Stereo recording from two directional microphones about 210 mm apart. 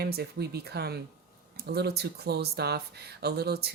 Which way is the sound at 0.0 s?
50° right (ahead or behind).